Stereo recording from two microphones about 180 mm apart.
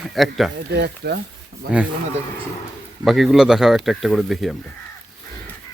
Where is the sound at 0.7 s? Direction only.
65° right (ahead or behind).